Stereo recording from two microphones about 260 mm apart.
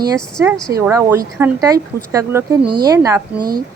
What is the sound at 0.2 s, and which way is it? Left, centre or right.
Speech, centre.